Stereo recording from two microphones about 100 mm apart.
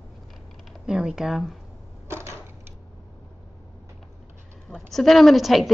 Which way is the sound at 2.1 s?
25° right (ahead or behind).